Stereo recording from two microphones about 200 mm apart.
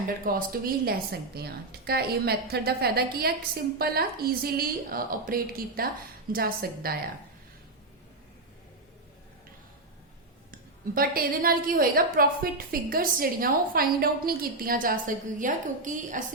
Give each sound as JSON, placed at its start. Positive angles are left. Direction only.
{"t": 0.3, "sound": "a woman's voice", "side_deg": -45}
{"t": 10.5, "sound": "a woman's voice", "side_deg": -45}